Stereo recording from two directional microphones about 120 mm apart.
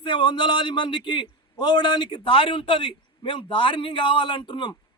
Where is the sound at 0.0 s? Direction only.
40° left (ahead or behind).